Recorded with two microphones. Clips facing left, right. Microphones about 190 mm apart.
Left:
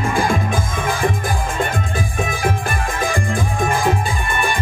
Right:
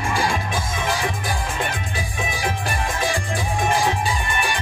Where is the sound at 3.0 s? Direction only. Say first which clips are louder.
Left 5 dB; 50° left (ahead or behind).